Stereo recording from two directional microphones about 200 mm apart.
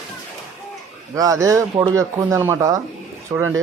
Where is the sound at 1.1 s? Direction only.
15° right (ahead or behind).